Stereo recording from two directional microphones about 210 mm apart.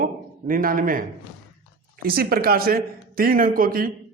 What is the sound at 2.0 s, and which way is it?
A man's voice, 45° right (ahead or behind).